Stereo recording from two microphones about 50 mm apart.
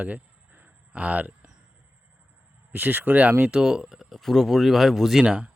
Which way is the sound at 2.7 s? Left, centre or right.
Right.